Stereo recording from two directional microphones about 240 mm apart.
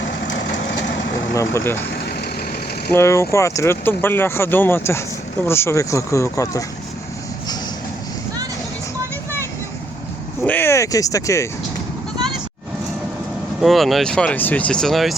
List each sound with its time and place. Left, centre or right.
1.3 s speech: centre
1.9 s vehicle: left
2.9 s speech: centre
10.4 s a sound: centre
13.6 s speech: centre